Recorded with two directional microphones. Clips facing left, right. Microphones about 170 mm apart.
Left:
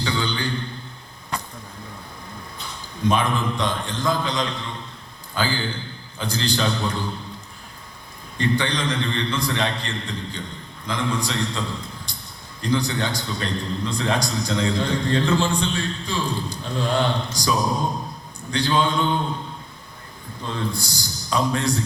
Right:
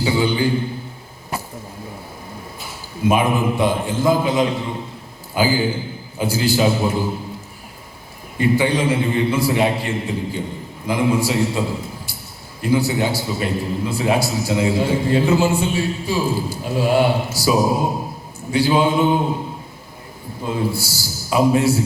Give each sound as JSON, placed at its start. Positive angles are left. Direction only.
{"t": 0.0, "sound": "a man's voice", "side_deg": -5}
{"t": 3.0, "sound": "a man's voice", "side_deg": -10}
{"t": 8.4, "sound": "a man's voice", "side_deg": -10}